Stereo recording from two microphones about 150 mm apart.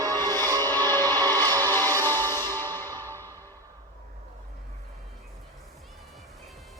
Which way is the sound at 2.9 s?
20° right (ahead or behind).